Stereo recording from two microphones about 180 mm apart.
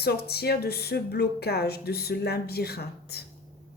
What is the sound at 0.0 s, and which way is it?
Speech, 60° left (ahead or behind).